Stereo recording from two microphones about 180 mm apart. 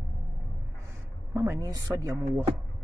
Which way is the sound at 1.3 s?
15° right (ahead or behind).